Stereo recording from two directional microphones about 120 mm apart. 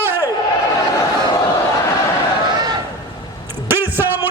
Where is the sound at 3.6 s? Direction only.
15° right (ahead or behind).